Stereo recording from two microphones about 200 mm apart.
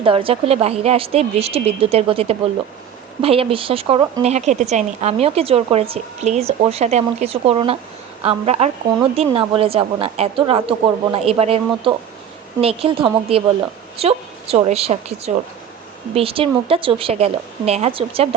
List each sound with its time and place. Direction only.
0.0 s a woman's voice: 25° right (ahead or behind)